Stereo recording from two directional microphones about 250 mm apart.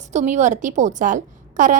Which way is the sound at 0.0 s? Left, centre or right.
Right.